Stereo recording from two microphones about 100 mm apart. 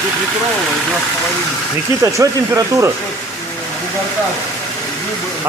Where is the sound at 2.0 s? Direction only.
30° right (ahead or behind).